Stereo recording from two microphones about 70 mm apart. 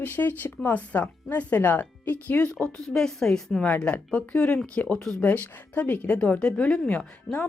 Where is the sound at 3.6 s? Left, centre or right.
Centre.